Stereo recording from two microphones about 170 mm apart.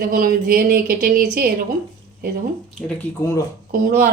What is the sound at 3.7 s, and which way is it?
Speech, 60° right (ahead or behind).